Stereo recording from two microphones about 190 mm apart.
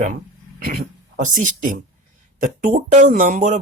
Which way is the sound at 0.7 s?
40° right (ahead or behind).